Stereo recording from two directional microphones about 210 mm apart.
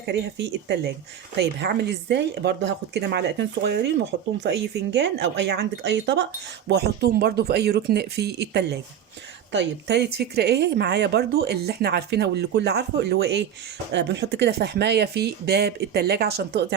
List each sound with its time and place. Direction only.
0.0 s speech: 55° right (ahead or behind)